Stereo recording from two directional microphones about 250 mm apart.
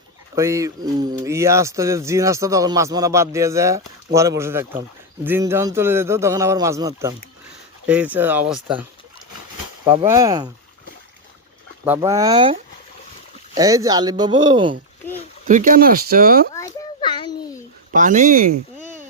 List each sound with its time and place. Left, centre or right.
0.3 s a man's voice: centre
11.9 s a man's voice: centre
15.4 s speech: right
16.6 s a sound: centre
17.9 s speech: right